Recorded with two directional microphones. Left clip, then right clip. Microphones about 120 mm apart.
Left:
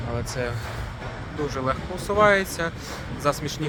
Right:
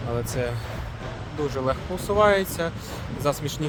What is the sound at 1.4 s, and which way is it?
Speech, 25° right (ahead or behind).